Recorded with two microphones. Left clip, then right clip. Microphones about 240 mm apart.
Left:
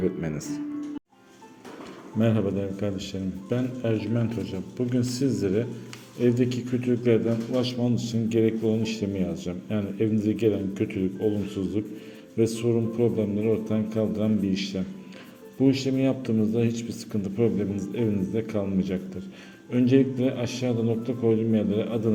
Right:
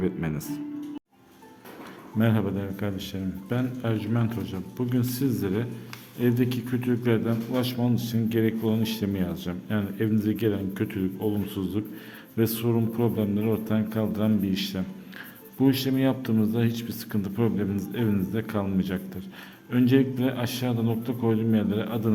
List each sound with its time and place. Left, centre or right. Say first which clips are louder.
0.0 s a man's voice: left 2 dB; centre
2.1 s a man's voice: left 2 dB; centre